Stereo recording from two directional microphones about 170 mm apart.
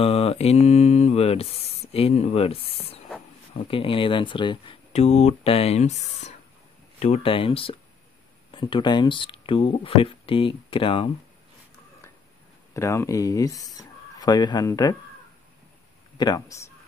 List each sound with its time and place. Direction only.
0.0 s mantra: 35° left (ahead or behind)
3.5 s speech: 30° left (ahead or behind)
12.7 s speech: 15° left (ahead or behind)
16.2 s speech: 20° left (ahead or behind)